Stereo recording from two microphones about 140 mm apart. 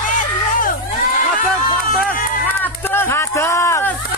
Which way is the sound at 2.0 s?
15° left (ahead or behind).